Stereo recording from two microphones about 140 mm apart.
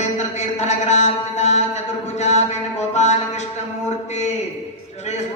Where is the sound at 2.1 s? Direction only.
55° left (ahead or behind).